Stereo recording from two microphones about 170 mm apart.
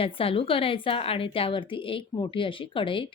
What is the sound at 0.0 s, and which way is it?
A woman's voice, 35° left (ahead or behind).